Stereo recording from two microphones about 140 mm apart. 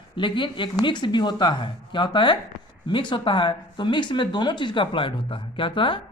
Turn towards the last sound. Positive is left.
turn(degrees=35)  # may be behind; listen again after turning